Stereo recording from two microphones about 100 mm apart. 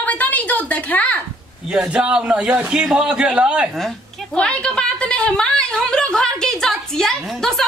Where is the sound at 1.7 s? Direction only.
10° right (ahead or behind).